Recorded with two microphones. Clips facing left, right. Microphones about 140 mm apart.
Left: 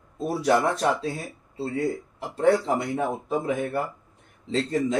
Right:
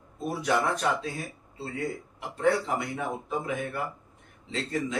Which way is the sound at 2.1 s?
35° left (ahead or behind).